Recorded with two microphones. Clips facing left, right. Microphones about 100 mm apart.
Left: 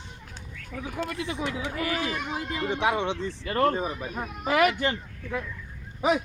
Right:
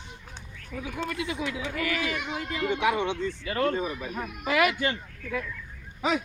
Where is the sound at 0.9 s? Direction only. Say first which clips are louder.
Even; 35° left (ahead or behind).